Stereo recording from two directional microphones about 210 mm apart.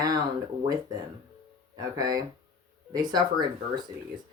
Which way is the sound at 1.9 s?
20° right (ahead or behind).